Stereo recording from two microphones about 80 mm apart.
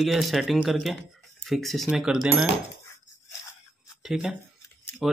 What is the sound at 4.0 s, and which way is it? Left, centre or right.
Speech, centre.